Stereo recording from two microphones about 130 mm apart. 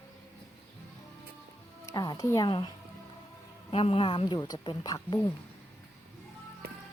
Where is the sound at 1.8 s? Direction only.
30° left (ahead or behind).